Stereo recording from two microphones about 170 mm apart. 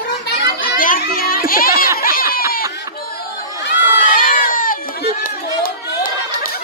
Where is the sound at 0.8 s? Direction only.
55° left (ahead or behind).